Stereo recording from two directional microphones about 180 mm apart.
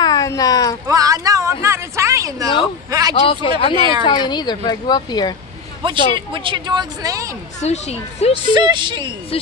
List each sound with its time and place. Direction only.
0.0 s a sound: 20° left (ahead or behind)
0.8 s a sound: 20° right (ahead or behind)
2.9 s speech: 20° right (ahead or behind)
3.2 s a woman's voice: 30° left (ahead or behind)
5.8 s speech: 25° right (ahead or behind)
7.6 s speech: 35° left (ahead or behind)
8.4 s speech: 25° right (ahead or behind)